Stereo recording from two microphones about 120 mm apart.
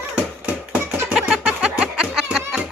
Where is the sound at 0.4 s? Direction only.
10° right (ahead or behind).